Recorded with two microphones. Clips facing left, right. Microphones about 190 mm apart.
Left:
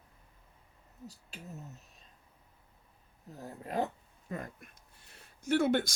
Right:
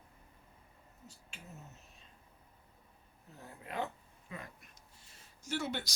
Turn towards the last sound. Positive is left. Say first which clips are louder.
# left 10 dB
turn(degrees=50)  # may be behind; listen again after turning